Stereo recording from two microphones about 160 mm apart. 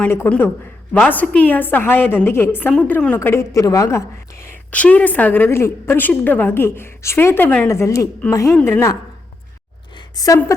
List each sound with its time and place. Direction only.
0.0 s a woman's voice: 10° left (ahead or behind)
10.2 s a woman's voice: 20° left (ahead or behind)